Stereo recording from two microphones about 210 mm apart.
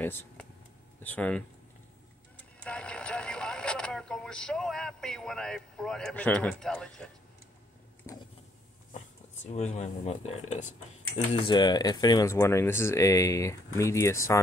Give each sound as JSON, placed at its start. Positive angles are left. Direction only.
{"t": 0.0, "sound": "a sound", "side_deg": 10}
{"t": 1.0, "sound": "speech", "side_deg": 5}
{"t": 2.6, "sound": "speech", "side_deg": 5}
{"t": 8.1, "sound": "a sound", "side_deg": 15}
{"t": 9.5, "sound": "speech", "side_deg": 35}
{"t": 11.3, "sound": "speech", "side_deg": 20}